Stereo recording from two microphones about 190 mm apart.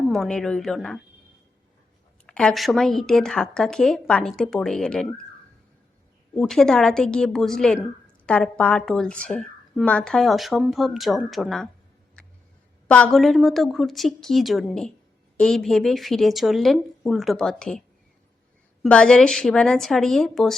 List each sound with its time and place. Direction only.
0.1 s a woman's voice: centre (ahead or behind)
2.2 s a woman's voice: 5° left (ahead or behind)
6.4 s a woman's voice: centre (ahead or behind)
12.2 s a sound: 5° left (ahead or behind)
12.9 s a woman's voice: 5° left (ahead or behind)